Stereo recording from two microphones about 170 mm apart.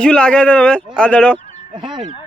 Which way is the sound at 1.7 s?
25° right (ahead or behind).